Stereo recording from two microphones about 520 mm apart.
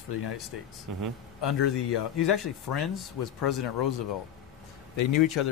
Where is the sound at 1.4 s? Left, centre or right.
Left.